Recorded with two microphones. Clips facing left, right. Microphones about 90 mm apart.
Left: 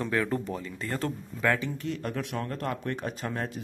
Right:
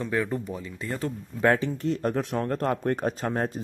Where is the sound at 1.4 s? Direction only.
30° right (ahead or behind).